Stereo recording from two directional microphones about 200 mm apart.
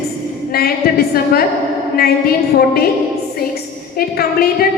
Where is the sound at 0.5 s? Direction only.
50° left (ahead or behind).